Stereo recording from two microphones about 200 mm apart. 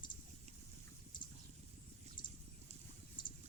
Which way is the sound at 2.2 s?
20° left (ahead or behind).